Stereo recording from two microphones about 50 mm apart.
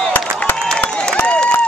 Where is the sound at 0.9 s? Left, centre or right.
Centre.